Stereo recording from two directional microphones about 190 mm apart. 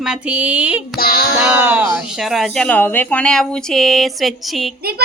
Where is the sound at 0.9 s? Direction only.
50° left (ahead or behind).